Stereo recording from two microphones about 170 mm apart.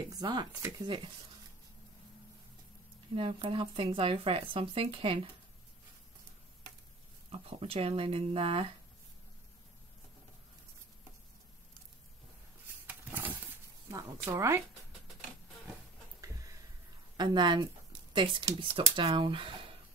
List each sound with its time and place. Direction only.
0.1 s speech: 25° right (ahead or behind)
3.2 s speech: 30° right (ahead or behind)
7.2 s speech: 35° right (ahead or behind)
12.8 s a sound: 10° right (ahead or behind)
13.8 s speech: 20° right (ahead or behind)
16.2 s a sound: 20° right (ahead or behind)
17.2 s speech: 25° right (ahead or behind)